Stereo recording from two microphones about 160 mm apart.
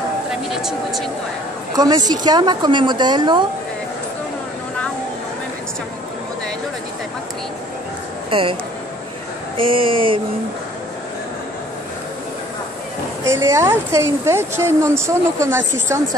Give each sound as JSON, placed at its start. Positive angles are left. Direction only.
{"t": 0.5, "sound": "speech", "side_deg": -5}
{"t": 1.7, "sound": "a woman's voice", "side_deg": -25}
{"t": 8.3, "sound": "speech", "side_deg": -35}
{"t": 9.6, "sound": "speech", "side_deg": -35}
{"t": 13.2, "sound": "a woman's voice", "side_deg": -15}